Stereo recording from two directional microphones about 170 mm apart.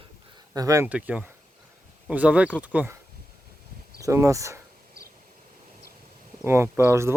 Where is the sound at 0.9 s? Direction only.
10° right (ahead or behind).